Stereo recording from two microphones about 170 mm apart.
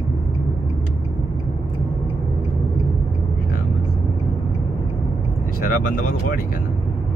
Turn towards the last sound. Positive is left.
turn(degrees=55)  # may be behind; listen again after turning